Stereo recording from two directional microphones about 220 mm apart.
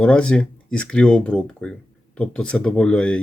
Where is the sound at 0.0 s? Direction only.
5° left (ahead or behind).